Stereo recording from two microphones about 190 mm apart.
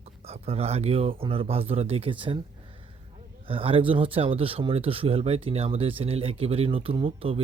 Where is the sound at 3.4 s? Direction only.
30° right (ahead or behind).